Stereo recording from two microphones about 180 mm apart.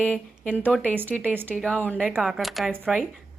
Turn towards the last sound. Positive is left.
turn(degrees=0)  # may be behind; listen again after turning